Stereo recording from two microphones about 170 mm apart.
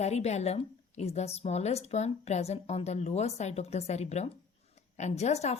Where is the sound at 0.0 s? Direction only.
40° left (ahead or behind).